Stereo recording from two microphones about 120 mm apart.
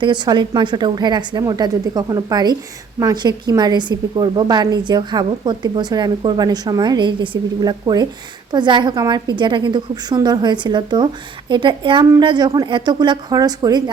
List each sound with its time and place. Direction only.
0.0 s a woman's voice: 40° right (ahead or behind)